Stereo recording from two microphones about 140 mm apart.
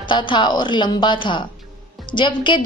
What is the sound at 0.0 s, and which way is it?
A woman's voice, 35° left (ahead or behind).